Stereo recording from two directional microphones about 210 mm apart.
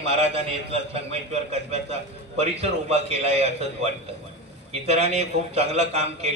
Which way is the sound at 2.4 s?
30° right (ahead or behind).